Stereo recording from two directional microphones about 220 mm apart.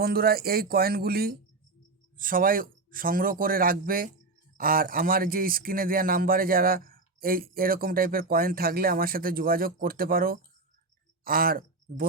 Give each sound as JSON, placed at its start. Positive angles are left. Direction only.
{"t": 0.0, "sound": "speech", "side_deg": -45}